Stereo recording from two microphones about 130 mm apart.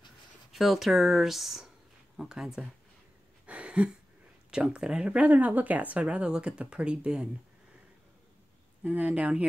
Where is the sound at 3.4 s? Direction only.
10° right (ahead or behind).